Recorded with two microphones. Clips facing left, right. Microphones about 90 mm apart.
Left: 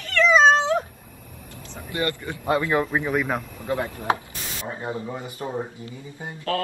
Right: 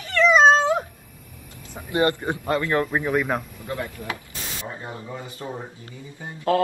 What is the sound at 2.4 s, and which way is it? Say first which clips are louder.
Speech: left 2 dB; 15° left (ahead or behind).